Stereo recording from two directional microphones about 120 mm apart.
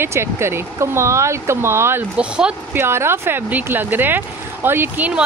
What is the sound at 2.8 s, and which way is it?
Speech, 20° right (ahead or behind).